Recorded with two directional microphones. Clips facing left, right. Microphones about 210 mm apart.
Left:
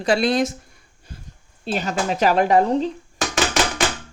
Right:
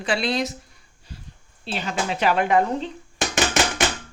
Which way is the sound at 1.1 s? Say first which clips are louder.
Left 1 dB; 50° left (ahead or behind).